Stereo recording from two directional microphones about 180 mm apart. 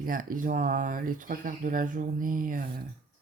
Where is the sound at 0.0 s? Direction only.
50° right (ahead or behind).